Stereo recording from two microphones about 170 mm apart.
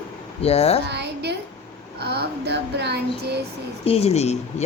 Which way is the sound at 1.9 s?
70° right (ahead or behind).